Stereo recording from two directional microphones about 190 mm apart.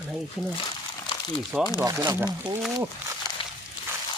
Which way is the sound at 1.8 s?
20° right (ahead or behind).